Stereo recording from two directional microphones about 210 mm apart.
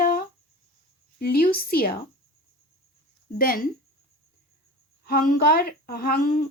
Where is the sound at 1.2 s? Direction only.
45° left (ahead or behind).